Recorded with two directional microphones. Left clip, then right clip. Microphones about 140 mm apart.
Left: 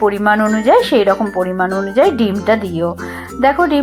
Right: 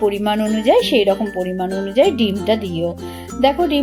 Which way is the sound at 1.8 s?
40° left (ahead or behind).